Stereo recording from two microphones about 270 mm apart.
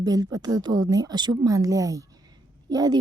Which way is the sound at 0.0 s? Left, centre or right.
Centre.